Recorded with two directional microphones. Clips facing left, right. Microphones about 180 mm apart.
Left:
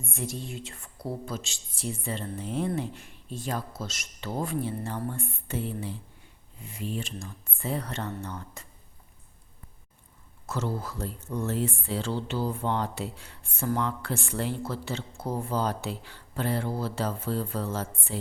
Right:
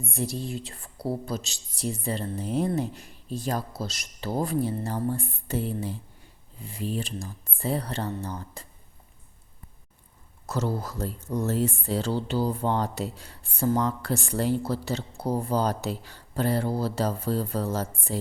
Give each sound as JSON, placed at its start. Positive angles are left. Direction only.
{"t": 0.0, "sound": "speech", "side_deg": -35}
{"t": 10.4, "sound": "speech", "side_deg": -40}